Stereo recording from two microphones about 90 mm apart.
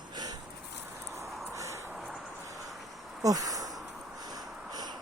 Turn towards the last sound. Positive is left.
turn(degrees=-40)  # may be behind; listen again after turning